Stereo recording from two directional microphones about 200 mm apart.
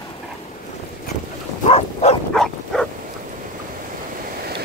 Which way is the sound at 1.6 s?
30° left (ahead or behind).